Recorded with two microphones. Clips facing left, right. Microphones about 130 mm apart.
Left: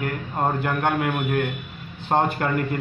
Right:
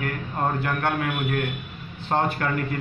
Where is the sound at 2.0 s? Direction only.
20° left (ahead or behind).